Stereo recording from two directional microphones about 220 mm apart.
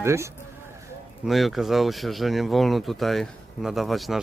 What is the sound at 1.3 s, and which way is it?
A man's voice, centre (ahead or behind).